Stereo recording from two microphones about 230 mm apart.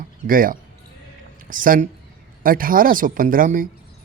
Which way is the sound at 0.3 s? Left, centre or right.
Right.